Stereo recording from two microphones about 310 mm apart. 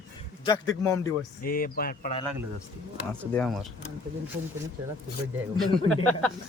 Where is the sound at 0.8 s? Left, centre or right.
Centre.